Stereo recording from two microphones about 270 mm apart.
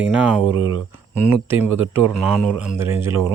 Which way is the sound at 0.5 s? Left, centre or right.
Right.